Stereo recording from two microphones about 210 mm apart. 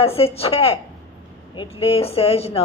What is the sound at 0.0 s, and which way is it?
Speech, 25° left (ahead or behind).